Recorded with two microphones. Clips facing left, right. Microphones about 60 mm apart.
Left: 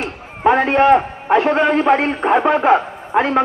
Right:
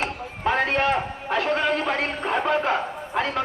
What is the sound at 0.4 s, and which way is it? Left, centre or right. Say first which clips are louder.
A man's voice: left 9 dB; left.